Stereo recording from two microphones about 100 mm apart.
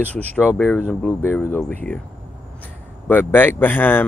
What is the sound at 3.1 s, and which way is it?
Speech, 20° left (ahead or behind).